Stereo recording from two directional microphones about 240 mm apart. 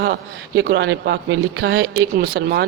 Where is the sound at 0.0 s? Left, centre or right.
Right.